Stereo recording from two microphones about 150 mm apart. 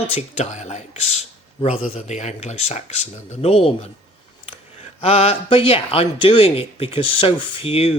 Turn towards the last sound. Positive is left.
turn(degrees=40)  # may be behind; listen again after turning